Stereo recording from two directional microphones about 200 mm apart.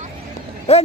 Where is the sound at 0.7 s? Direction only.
30° left (ahead or behind).